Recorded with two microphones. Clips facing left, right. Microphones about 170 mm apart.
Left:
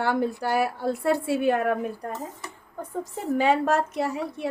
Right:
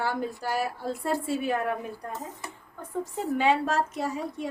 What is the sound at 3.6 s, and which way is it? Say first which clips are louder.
Speech: left 4 dB; 60° left (ahead or behind).